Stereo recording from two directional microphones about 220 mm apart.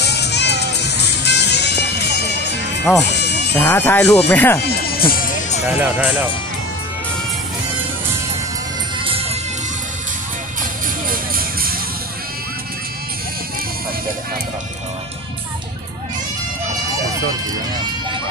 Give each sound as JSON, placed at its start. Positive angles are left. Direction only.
{"t": 0.0, "sound": "music", "side_deg": 50}
{"t": 2.8, "sound": "speech", "side_deg": 5}
{"t": 3.2, "sound": "music", "side_deg": 50}
{"t": 3.5, "sound": "speech", "side_deg": 10}
{"t": 4.6, "sound": "music", "side_deg": 45}
{"t": 5.7, "sound": "speech", "side_deg": -5}
{"t": 9.0, "sound": "music", "side_deg": -25}
{"t": 11.1, "sound": "music", "side_deg": -40}